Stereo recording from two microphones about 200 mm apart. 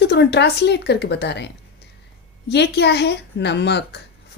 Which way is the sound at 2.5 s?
60° left (ahead or behind).